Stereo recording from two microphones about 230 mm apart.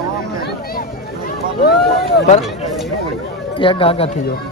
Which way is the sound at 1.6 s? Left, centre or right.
Left.